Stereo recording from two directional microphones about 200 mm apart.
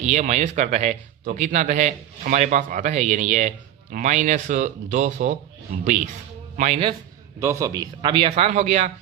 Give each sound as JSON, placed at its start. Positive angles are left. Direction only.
{"t": 0.0, "sound": "a man's voice", "side_deg": -35}
{"t": 6.6, "sound": "speech", "side_deg": -30}
{"t": 7.3, "sound": "speech", "side_deg": -15}